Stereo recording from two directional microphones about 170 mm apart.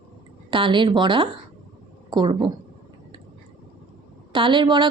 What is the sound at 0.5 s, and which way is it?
Speech, 30° right (ahead or behind).